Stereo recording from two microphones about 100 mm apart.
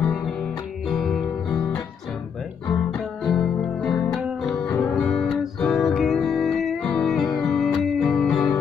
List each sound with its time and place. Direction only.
0.8 s guitar: 5° left (ahead or behind)
2.7 s music: 10° left (ahead or behind)
4.6 s music: 20° left (ahead or behind)
5.0 s music: centre (ahead or behind)